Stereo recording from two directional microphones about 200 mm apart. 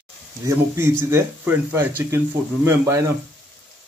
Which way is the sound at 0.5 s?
10° right (ahead or behind).